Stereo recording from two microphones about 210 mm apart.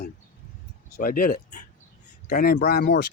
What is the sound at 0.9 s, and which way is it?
Speech, 40° left (ahead or behind).